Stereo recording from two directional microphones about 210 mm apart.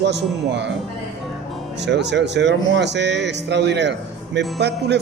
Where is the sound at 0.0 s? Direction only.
55° right (ahead or behind).